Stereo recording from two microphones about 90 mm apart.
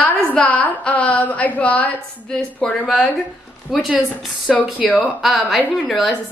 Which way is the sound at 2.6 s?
5° left (ahead or behind).